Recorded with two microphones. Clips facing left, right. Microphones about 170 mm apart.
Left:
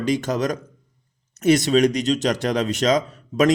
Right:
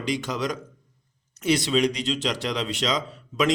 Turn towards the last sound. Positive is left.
turn(degrees=45)  # may be behind; listen again after turning